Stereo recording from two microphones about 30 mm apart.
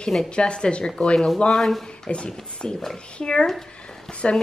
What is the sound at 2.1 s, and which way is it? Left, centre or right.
A woman's voice, left.